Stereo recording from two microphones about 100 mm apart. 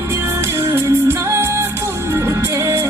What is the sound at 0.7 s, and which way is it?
Music, 25° right (ahead or behind).